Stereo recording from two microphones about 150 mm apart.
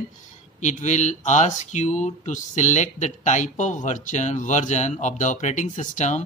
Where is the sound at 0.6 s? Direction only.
50° left (ahead or behind).